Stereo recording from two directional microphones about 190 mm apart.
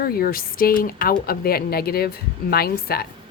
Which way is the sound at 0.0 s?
50° left (ahead or behind).